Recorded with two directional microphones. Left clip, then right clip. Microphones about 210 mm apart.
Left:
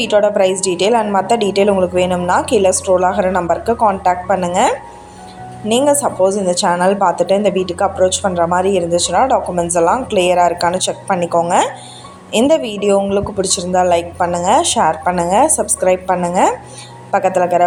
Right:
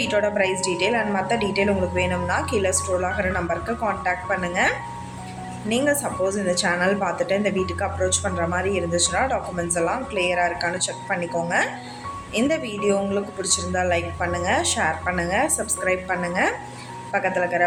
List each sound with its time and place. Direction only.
0.0 s a woman's voice: 25° left (ahead or behind)